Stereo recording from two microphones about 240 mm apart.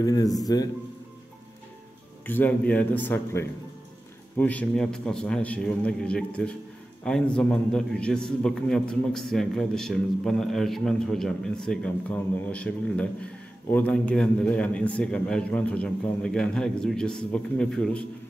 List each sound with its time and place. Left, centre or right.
0.0 s speech: centre
2.2 s a man's voice: centre